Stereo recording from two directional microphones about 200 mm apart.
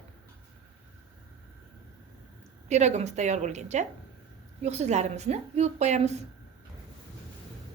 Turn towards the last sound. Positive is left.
turn(degrees=-35)  # may be behind; listen again after turning